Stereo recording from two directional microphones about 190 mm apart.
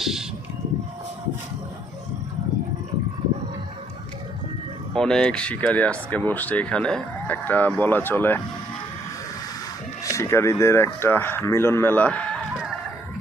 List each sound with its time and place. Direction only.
0.0 s a sound: centre (ahead or behind)
4.9 s speech: 5° left (ahead or behind)
10.0 s speech: 15° left (ahead or behind); by 12.7 s centre (ahead or behind)